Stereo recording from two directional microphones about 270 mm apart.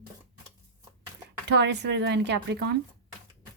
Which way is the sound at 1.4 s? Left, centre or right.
Right.